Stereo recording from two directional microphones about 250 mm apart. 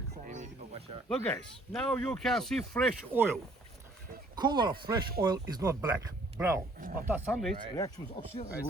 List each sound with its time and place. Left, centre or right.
0.3 s a sound: right
1.0 s speech: centre
4.4 s speech: centre
6.7 s speech: right
7.1 s speech: centre
7.8 s speech: centre